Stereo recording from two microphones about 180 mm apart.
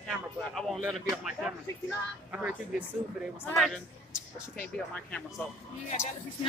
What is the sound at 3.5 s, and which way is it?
A woman's voice, centre (ahead or behind).